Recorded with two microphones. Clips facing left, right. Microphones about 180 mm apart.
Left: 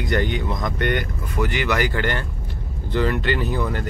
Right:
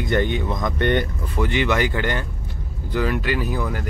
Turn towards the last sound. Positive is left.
turn(degrees=-10)  # may be behind; listen again after turning